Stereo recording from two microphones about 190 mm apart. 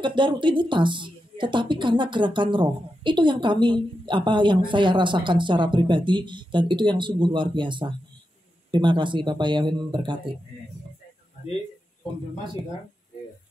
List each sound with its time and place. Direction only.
0.0 s a woman's voice: 25° right (ahead or behind)